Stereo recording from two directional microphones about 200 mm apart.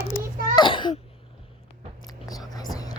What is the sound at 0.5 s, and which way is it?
Throat clearing, 25° left (ahead or behind).